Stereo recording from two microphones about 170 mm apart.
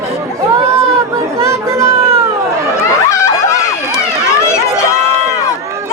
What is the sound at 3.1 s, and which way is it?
Run, 15° left (ahead or behind).